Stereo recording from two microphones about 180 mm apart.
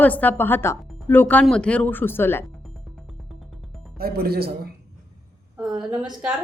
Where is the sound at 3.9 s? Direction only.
60° right (ahead or behind).